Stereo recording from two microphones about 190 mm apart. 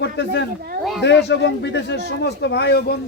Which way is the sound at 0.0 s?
65° left (ahead or behind).